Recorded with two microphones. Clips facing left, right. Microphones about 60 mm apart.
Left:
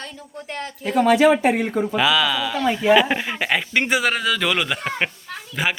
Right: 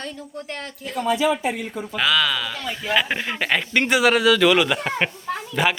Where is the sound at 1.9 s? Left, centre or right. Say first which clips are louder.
Even; centre.